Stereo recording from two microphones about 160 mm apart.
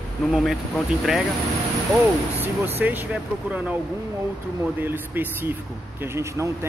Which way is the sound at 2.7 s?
10° right (ahead or behind).